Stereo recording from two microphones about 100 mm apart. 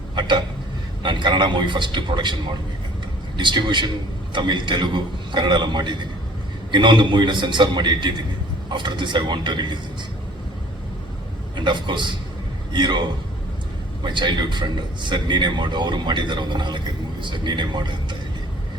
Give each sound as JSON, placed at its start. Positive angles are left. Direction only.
{"t": 0.2, "sound": "a man's voice", "side_deg": -50}
{"t": 11.5, "sound": "a man's voice", "side_deg": -50}